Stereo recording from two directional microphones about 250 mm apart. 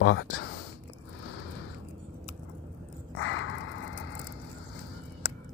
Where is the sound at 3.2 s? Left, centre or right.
Left.